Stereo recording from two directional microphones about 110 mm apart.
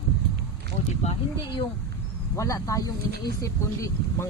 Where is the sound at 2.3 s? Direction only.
30° left (ahead or behind).